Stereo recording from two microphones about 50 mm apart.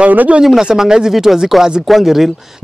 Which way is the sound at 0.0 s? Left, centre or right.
Right.